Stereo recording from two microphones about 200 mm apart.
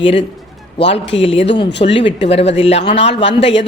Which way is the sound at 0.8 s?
60° left (ahead or behind).